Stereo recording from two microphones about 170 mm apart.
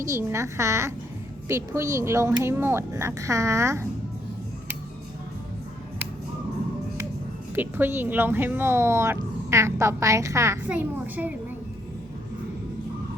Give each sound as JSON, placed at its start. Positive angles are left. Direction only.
{"t": 0.0, "sound": "speech", "side_deg": -15}
{"t": 7.5, "sound": "speech", "side_deg": -10}